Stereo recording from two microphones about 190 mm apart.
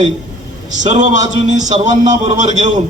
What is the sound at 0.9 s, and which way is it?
A man's voice, 40° right (ahead or behind).